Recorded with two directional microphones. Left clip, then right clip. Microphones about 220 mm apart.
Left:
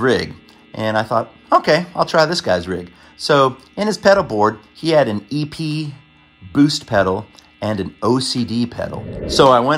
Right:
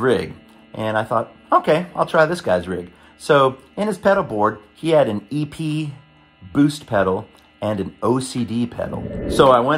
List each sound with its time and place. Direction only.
0.0 s speech: 20° left (ahead or behind)